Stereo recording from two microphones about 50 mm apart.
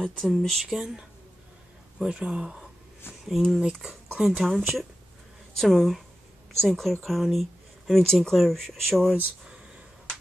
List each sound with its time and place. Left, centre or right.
0.0 s speech: centre
2.0 s speech: right
3.1 s speech: centre